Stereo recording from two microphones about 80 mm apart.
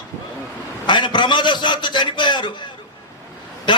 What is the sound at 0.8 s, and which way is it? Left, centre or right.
A man's voice, left.